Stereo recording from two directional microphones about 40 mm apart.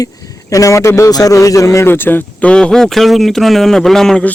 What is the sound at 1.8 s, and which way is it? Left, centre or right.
Speech, left.